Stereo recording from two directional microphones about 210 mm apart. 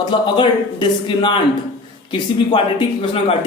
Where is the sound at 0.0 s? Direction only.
20° left (ahead or behind).